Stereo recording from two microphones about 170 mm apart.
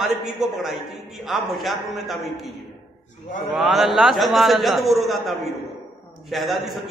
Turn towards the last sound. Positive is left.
turn(degrees=0)  # may be behind; listen again after turning